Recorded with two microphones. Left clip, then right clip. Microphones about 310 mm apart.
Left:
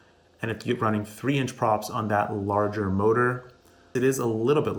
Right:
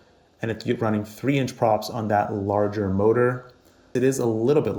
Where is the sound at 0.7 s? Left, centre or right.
Right.